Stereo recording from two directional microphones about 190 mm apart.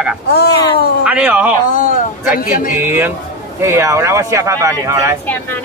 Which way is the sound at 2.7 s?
10° right (ahead or behind).